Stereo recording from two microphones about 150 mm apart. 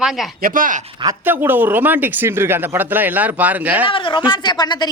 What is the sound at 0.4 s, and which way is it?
Speech, 65° right (ahead or behind).